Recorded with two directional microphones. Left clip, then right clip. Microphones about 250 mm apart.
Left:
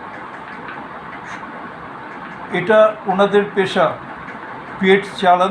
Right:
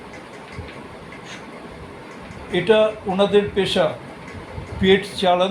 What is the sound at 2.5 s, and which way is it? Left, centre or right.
Speech, right.